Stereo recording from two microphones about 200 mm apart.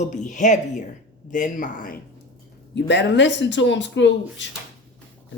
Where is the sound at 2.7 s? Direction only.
60° left (ahead or behind).